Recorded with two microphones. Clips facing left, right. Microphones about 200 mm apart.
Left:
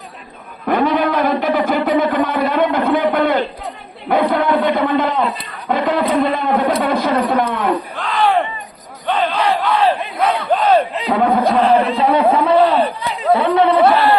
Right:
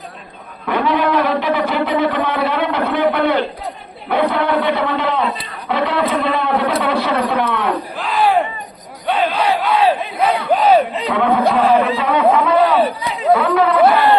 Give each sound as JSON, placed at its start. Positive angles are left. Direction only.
{"t": 0.7, "sound": "a sound", "side_deg": 45}
{"t": 4.1, "sound": "a man's voice", "side_deg": 45}
{"t": 7.9, "sound": "battle cry", "side_deg": -5}
{"t": 11.1, "sound": "speech", "side_deg": 40}
{"t": 12.8, "sound": "chatter", "side_deg": 0}
{"t": 13.4, "sound": "chatter", "side_deg": 30}